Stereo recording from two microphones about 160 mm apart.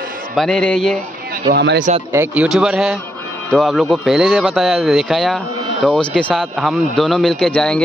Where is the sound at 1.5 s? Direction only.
90° right.